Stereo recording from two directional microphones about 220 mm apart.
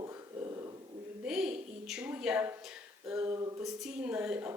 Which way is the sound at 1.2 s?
5° right (ahead or behind).